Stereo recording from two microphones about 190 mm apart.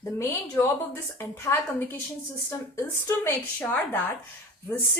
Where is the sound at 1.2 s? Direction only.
15° left (ahead or behind).